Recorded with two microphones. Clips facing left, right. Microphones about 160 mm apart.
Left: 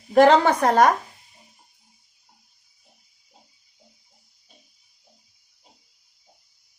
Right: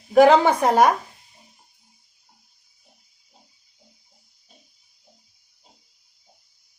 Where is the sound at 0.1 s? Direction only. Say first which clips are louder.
Right 1 dB; 5° right (ahead or behind).